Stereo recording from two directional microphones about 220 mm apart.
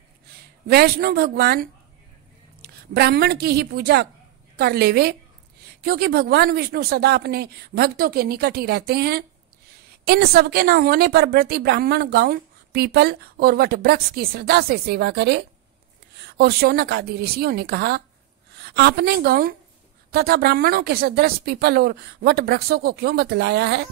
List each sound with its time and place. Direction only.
0.7 s a woman's voice: 45° right (ahead or behind)